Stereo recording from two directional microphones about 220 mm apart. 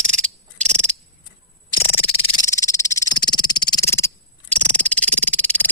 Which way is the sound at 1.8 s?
25° left (ahead or behind).